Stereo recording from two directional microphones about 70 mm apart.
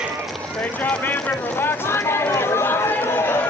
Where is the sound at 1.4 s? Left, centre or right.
Left.